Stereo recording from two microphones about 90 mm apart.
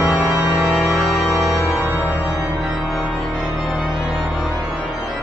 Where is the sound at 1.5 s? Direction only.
30° left (ahead or behind).